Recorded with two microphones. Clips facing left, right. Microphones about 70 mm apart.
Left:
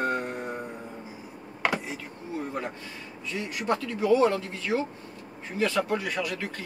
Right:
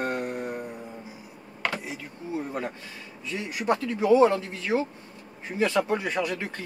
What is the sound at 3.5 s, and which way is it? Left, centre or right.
A man's voice, right.